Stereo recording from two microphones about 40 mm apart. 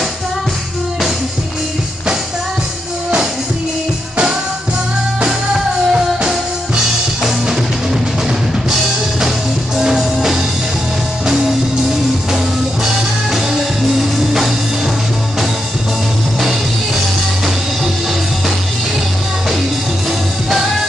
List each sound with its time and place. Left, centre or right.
5.5 s music: centre
9.8 s music: centre
13.9 s music: centre